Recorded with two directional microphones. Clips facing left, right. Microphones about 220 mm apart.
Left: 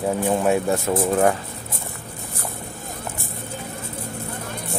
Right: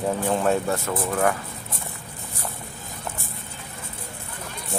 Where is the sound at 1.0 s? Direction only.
25° left (ahead or behind).